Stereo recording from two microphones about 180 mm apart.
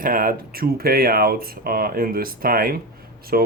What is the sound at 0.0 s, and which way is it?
Speech, 50° right (ahead or behind).